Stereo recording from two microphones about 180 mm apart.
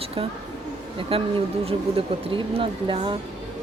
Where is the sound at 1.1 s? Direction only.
30° right (ahead or behind).